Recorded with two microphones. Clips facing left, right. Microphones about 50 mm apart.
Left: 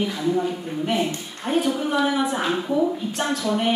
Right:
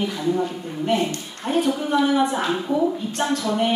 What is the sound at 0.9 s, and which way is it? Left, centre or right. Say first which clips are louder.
A woman's voice: right 3 dB; centre.